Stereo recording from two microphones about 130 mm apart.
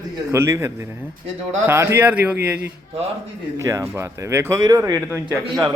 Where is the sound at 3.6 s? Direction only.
25° right (ahead or behind).